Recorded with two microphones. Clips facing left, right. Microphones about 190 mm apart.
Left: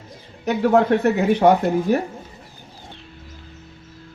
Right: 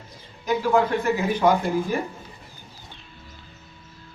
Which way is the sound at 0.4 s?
70° left (ahead or behind).